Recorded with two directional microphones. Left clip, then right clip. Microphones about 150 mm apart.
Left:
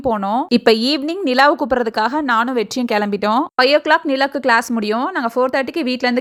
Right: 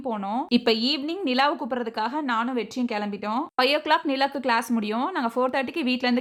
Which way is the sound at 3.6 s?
35° left (ahead or behind).